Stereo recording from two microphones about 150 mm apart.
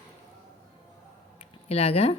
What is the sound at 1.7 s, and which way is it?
Speech, 40° left (ahead or behind).